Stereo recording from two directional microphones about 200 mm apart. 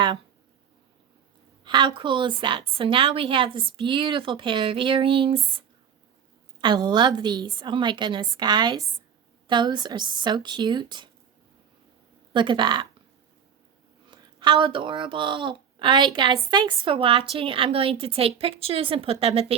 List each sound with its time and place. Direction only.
1.6 s a woman's voice: 25° right (ahead or behind)
12.3 s a woman's voice: 25° right (ahead or behind)
14.1 s a woman's voice: 25° right (ahead or behind)